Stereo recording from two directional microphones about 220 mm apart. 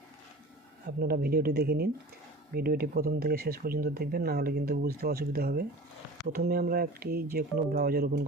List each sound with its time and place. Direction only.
0.9 s speech: 45° right (ahead or behind)